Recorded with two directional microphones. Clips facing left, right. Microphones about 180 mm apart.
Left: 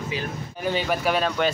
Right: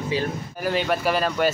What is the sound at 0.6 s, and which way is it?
Speech, centre (ahead or behind).